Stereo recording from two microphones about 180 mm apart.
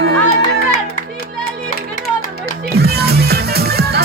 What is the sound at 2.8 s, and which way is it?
Music, 60° right (ahead or behind).